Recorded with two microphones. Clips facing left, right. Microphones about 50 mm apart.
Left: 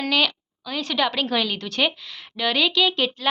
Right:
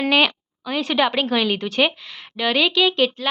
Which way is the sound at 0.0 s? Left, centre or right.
Right.